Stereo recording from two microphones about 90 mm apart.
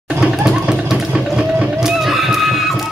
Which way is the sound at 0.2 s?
10° right (ahead or behind).